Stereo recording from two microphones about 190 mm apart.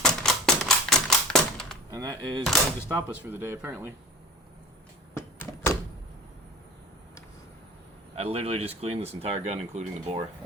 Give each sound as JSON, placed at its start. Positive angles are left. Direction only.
{"t": 0.0, "sound": "typewriter", "side_deg": 5}
{"t": 1.9, "sound": "a sound", "side_deg": -20}
{"t": 2.9, "sound": "speech", "side_deg": -10}
{"t": 5.1, "sound": "door", "side_deg": 15}
{"t": 8.1, "sound": "speech", "side_deg": -30}